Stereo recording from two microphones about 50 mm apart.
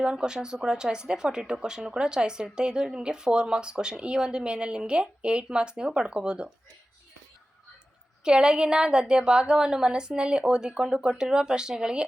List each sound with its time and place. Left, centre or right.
0.0 s speech: centre
8.2 s speech: centre